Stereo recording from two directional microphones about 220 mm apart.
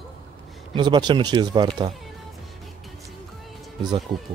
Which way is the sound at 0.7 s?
20° right (ahead or behind).